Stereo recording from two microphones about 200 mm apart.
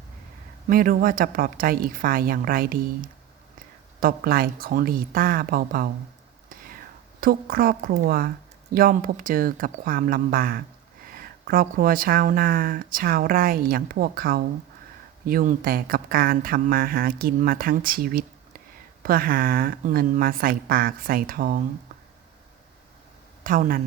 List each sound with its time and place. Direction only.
0.7 s speech: 45° right (ahead or behind)
7.2 s speech: 45° right (ahead or behind)
23.4 s speech: 45° right (ahead or behind)